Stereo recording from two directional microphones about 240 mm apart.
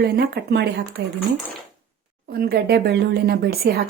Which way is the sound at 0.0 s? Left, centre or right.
Right.